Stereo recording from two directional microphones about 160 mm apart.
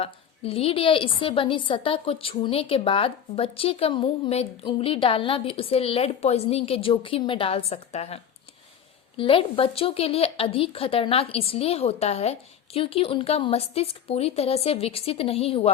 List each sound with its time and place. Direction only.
0.0 s a woman's voice: 35° left (ahead or behind)